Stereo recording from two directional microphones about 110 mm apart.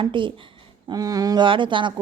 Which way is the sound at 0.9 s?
35° right (ahead or behind).